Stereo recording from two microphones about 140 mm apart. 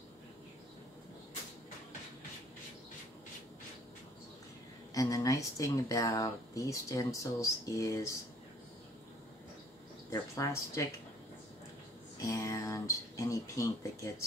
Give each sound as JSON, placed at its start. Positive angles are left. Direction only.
{"t": 4.9, "sound": "speech", "side_deg": 25}
{"t": 10.0, "sound": "speech", "side_deg": 20}
{"t": 12.3, "sound": "speech", "side_deg": 20}